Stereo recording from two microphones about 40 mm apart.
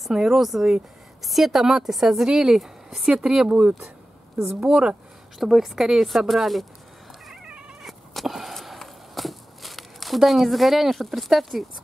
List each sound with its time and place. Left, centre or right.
0.1 s a woman's voice: centre
5.4 s speech: centre
6.0 s a woman's voice: centre
7.8 s power windows: centre
8.7 s a sound: centre